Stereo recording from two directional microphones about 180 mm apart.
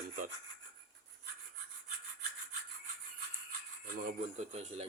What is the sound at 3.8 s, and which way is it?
Speech, 45° right (ahead or behind).